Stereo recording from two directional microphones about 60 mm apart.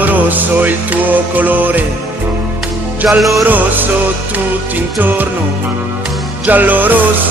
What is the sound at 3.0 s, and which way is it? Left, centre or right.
Music, centre.